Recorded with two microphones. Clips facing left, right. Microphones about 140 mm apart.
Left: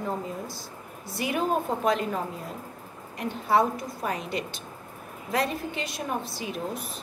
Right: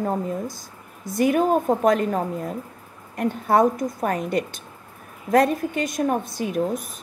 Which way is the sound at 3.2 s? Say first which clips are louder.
Right 5 dB; 50° right (ahead or behind).